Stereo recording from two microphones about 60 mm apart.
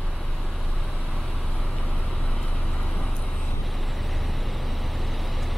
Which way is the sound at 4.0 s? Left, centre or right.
Centre.